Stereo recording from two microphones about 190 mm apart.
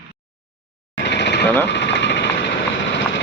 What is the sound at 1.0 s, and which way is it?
Jackhammer, 65° left (ahead or behind).